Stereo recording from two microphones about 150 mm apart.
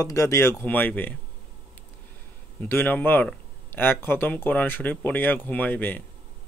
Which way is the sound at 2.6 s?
10° left (ahead or behind).